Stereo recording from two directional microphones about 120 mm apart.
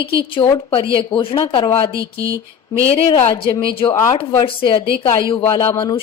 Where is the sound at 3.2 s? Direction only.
50° left (ahead or behind).